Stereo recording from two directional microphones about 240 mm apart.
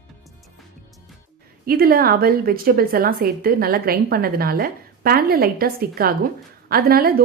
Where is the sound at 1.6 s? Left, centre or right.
Right.